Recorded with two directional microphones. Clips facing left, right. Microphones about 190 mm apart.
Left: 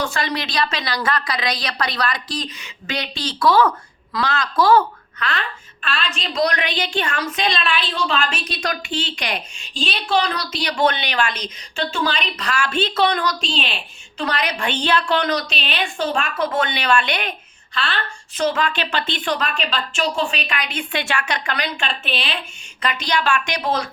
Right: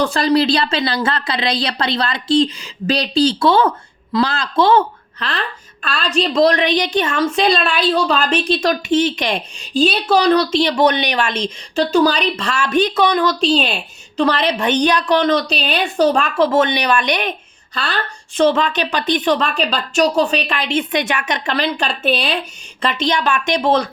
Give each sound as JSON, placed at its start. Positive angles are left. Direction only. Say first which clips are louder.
{"t": 0.0, "sound": "a woman's voice", "louder": "right 9 dB", "side_deg": -35}
{"t": 5.8, "sound": "a woman's voice", "louder": "right 8 dB", "side_deg": -40}
{"t": 6.4, "sound": "a woman's voice", "louder": "right 6 dB", "side_deg": -20}
{"t": 8.8, "sound": "a woman's voice", "louder": "right 10 dB", "side_deg": -20}
{"t": 9.6, "sound": "a woman's voice", "louder": "right 11 dB", "side_deg": -35}
{"t": 10.6, "sound": "a woman's voice", "louder": "right 6 dB", "side_deg": -20}
{"t": 11.8, "sound": "a woman's voice", "louder": "right 9 dB", "side_deg": -35}
{"t": 13.4, "sound": "a woman's voice", "louder": "right 10 dB", "side_deg": -40}
{"t": 16.7, "sound": "a woman's voice", "louder": "right 3 dB", "side_deg": -15}
{"t": 17.7, "sound": "a woman's voice", "louder": "right 3 dB", "side_deg": -40}
{"t": 18.4, "sound": "a woman's voice", "louder": "right 5 dB", "side_deg": -25}
{"t": 22.8, "sound": "a woman's voice", "louder": "right 4 dB", "side_deg": -25}